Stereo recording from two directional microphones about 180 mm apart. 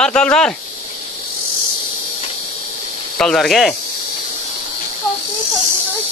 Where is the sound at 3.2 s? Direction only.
5° left (ahead or behind).